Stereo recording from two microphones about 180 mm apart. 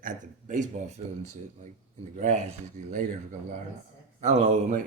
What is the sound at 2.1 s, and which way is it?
Speech, 40° right (ahead or behind).